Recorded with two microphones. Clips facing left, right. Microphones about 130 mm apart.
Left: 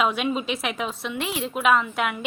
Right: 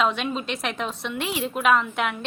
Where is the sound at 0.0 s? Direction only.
5° left (ahead or behind).